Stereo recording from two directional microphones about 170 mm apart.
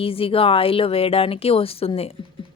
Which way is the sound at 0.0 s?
35° left (ahead or behind).